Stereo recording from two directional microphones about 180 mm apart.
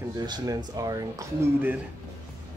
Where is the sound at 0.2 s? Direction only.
20° right (ahead or behind).